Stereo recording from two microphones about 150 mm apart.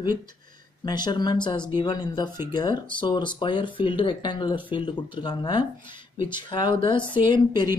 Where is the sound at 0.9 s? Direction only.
30° left (ahead or behind).